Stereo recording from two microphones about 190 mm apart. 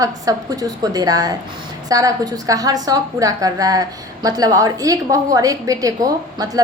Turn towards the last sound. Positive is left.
turn(degrees=-20)  # may be behind; listen again after turning